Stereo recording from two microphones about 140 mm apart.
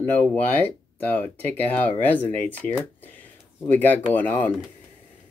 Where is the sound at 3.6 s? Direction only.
10° left (ahead or behind).